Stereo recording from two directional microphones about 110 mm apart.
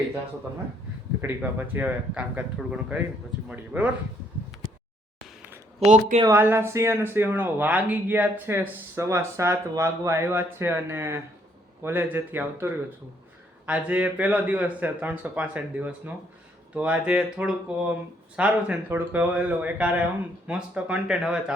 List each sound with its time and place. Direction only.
1.4 s speech: 15° right (ahead or behind)
5.8 s speech: 90° right
6.3 s speech: 20° right (ahead or behind)